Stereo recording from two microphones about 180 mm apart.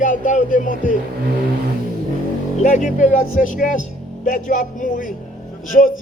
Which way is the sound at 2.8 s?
45° left (ahead or behind).